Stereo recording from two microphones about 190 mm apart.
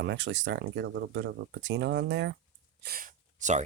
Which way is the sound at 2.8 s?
50° right (ahead or behind).